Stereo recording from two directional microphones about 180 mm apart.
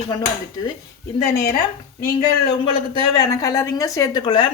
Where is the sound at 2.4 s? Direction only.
25° left (ahead or behind).